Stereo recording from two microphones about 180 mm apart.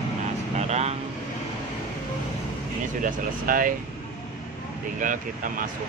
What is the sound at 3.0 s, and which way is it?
Speech, 50° right (ahead or behind).